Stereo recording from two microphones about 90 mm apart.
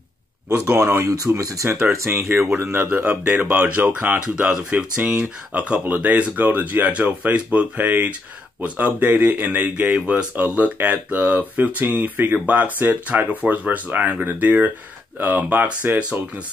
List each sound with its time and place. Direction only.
0.7 s speech: 35° right (ahead or behind); by 16.2 s 20° right (ahead or behind)